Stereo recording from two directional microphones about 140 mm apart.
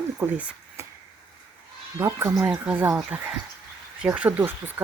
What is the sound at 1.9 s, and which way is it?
Speech, 20° right (ahead or behind).